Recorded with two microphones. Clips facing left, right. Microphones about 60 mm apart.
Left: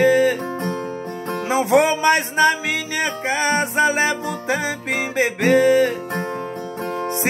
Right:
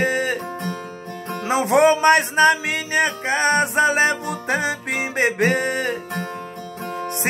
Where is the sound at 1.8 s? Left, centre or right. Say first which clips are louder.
Right 3 dB; right.